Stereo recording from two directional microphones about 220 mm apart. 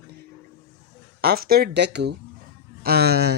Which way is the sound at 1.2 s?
45° right (ahead or behind).